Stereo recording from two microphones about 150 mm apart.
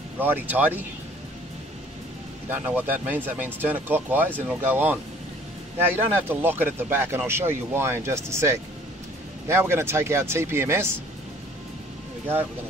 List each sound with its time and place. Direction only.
0.2 s speech: 10° right (ahead or behind)
2.5 s speech: 15° right (ahead or behind)